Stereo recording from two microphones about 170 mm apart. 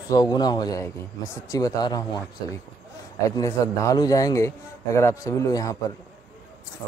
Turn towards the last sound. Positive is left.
turn(degrees=20)  # may be behind; listen again after turning